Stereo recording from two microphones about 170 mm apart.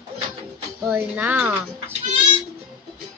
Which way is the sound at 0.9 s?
10° right (ahead or behind).